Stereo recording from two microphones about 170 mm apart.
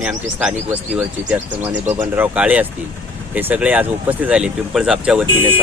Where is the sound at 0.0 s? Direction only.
5° right (ahead or behind).